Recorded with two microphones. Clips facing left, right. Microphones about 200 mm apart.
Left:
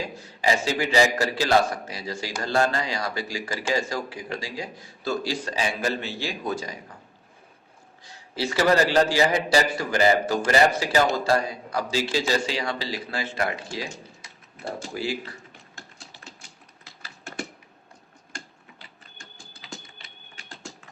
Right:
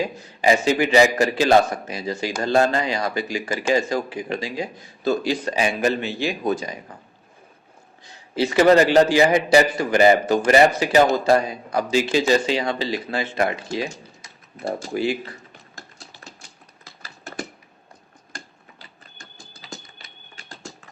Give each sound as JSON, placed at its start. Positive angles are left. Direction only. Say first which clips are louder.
{"t": 0.4, "sound": "speech", "louder": "right 6 dB", "side_deg": -20}
{"t": 8.0, "sound": "speech", "louder": "right 6 dB", "side_deg": -20}
{"t": 14.2, "sound": "a sound", "louder": "right 7 dB", "side_deg": -40}
{"t": 14.9, "sound": "speech", "louder": "right 6 dB", "side_deg": -20}
{"t": 16.8, "sound": "typing", "louder": "right 2 dB", "side_deg": -40}
{"t": 19.6, "sound": "a sound", "louder": "right 2 dB", "side_deg": -40}